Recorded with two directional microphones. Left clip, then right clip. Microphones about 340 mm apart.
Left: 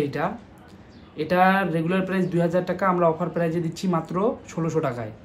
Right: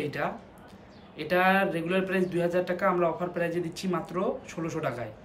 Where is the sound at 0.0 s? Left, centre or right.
Centre.